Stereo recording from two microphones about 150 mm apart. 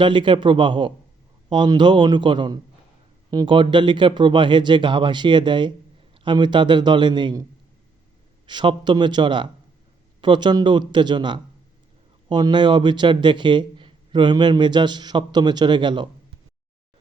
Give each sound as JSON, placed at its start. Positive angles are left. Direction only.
{"t": 0.0, "sound": "a man's voice", "side_deg": -35}
{"t": 8.4, "sound": "a man's voice", "side_deg": -30}